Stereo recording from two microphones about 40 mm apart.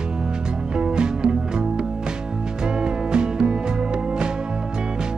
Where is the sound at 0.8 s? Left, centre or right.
Right.